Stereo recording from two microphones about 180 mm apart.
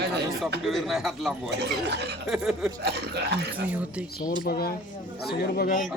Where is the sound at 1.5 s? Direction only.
65° right (ahead or behind).